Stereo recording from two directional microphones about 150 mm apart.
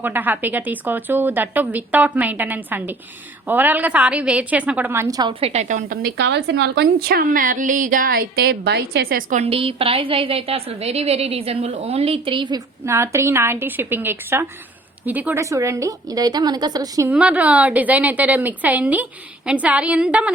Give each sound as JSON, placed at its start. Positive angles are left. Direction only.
{"t": 0.0, "sound": "a woman's voice", "side_deg": -10}
{"t": 5.3, "sound": "a woman's voice", "side_deg": -40}
{"t": 6.1, "sound": "a woman's voice", "side_deg": -90}
{"t": 9.4, "sound": "a woman's voice", "side_deg": -40}
{"t": 12.8, "sound": "a woman's voice", "side_deg": -20}
{"t": 17.1, "sound": "a woman's voice", "side_deg": -10}